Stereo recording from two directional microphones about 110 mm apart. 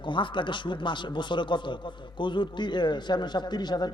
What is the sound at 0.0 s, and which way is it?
A man's voice, 45° left (ahead or behind).